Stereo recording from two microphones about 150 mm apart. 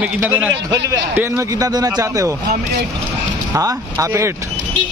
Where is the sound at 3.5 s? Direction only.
20° right (ahead or behind).